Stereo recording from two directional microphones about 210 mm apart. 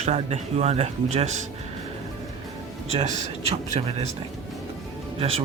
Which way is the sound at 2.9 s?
30° right (ahead or behind).